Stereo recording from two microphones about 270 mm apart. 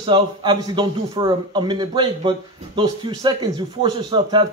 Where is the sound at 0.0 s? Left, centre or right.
Centre.